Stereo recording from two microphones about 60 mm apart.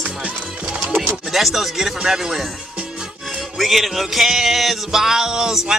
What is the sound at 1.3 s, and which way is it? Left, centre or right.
Music, centre.